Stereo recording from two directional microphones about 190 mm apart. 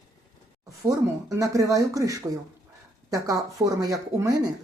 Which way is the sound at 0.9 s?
15° right (ahead or behind).